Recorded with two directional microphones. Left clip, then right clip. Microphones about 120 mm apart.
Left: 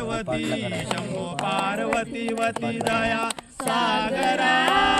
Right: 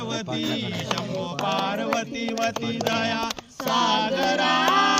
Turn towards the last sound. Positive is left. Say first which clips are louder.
# even
turn(degrees=-45)  # may be behind; listen again after turning